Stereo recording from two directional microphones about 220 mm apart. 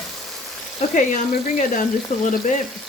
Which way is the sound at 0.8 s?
35° left (ahead or behind).